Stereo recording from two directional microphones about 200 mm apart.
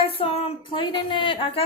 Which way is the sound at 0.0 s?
30° left (ahead or behind).